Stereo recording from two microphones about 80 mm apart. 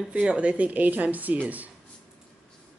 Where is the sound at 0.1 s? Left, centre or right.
Centre.